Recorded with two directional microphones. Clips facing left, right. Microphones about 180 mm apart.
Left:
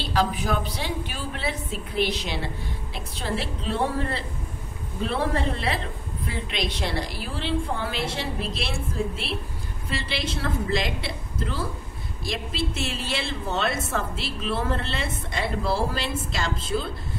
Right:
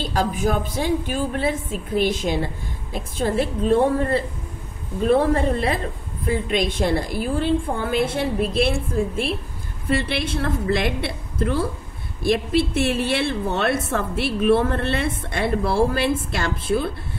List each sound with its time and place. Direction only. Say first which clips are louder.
0.0 s a woman's voice: right 3 dB; 45° right (ahead or behind)